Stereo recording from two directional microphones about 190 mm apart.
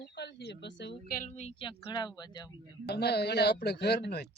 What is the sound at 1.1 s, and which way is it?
Speech, 40° left (ahead or behind).